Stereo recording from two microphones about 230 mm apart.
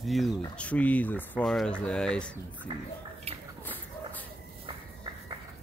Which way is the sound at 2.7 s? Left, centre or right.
Centre.